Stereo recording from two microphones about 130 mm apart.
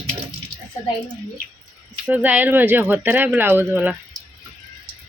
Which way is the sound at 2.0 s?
10° right (ahead or behind).